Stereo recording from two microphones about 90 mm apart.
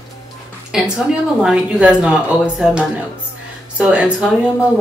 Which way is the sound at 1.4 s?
10° right (ahead or behind).